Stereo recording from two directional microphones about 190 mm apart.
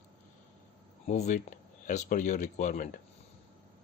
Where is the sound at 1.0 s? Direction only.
40° left (ahead or behind).